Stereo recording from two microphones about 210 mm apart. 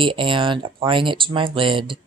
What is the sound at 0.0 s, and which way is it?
A woman's voice, 25° right (ahead or behind).